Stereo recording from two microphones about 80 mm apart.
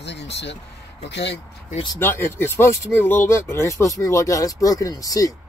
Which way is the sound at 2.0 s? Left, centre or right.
Left.